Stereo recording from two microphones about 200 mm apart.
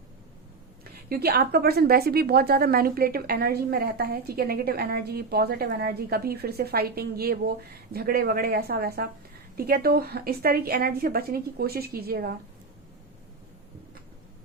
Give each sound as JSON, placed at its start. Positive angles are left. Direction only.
{"t": 1.1, "sound": "a woman's voice", "side_deg": -50}